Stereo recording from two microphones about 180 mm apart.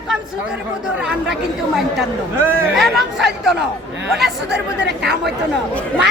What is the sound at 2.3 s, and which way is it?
Speech, 10° right (ahead or behind).